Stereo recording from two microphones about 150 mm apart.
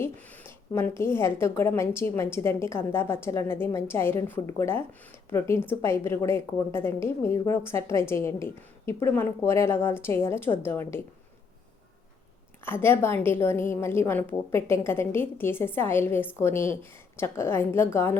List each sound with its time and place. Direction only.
0.0 s a woman's voice: 15° left (ahead or behind)
12.6 s a woman's voice: 15° left (ahead or behind)